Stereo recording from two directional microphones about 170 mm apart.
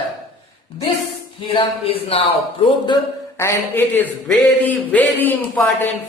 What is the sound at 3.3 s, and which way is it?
A man's voice, 15° left (ahead or behind).